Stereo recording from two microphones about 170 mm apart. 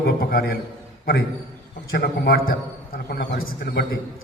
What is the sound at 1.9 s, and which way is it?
Speech, 60° left (ahead or behind).